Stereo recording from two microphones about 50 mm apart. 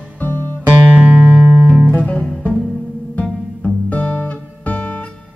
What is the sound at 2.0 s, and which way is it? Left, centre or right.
Music, left.